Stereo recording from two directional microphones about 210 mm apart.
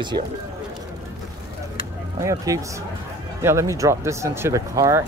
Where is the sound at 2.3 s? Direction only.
15° right (ahead or behind).